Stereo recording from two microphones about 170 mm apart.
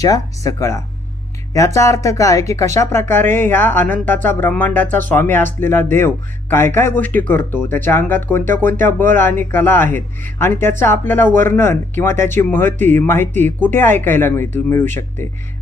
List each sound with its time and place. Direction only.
0.0 s speech: 20° left (ahead or behind)